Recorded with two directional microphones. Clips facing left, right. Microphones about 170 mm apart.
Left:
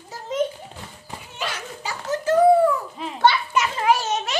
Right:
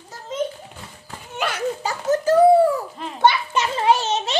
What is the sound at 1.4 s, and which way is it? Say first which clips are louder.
Speech: right 8 dB; 45° right (ahead or behind).